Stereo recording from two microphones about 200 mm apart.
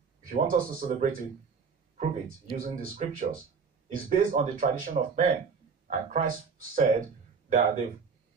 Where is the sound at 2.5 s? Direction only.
45° right (ahead or behind).